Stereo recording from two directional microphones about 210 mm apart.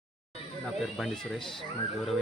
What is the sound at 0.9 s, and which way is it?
Speech, centre (ahead or behind).